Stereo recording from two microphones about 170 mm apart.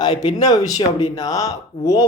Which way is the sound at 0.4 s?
20° left (ahead or behind).